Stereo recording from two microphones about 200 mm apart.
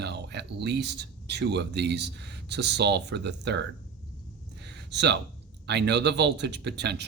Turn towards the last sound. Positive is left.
turn(degrees=-60)  # may be behind; listen again after turning